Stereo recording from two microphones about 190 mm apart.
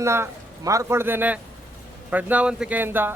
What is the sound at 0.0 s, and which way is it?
A man's voice, 15° right (ahead or behind).